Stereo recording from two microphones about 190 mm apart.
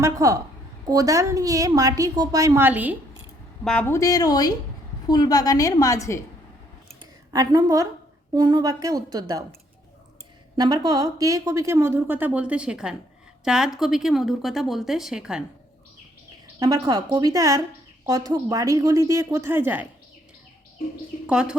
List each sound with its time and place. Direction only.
0.0 s speech: 15° right (ahead or behind)
3.6 s a woman's voice: 5° left (ahead or behind)
7.0 s a woman's voice: 20° right (ahead or behind)
10.6 s speech: 20° right (ahead or behind); by 15.4 s 5° right (ahead or behind)
16.6 s a woman's voice: 20° right (ahead or behind)
21.2 s speech: 5° right (ahead or behind)